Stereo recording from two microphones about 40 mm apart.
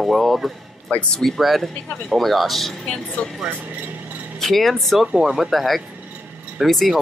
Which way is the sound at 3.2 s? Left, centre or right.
Left.